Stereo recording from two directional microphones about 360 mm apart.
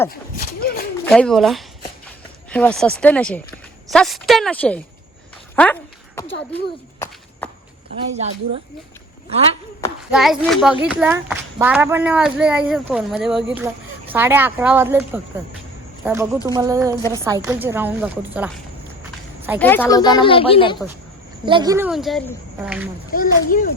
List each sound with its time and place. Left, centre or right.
0.6 s speech: left
1.0 s a woman's voice: centre
6.1 s speech: centre
7.9 s a woman's voice: centre
10.1 s a woman's voice: centre
21.4 s a woman's voice: centre
23.1 s speech: left